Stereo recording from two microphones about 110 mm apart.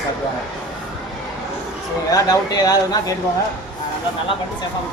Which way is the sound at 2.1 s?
35° left (ahead or behind).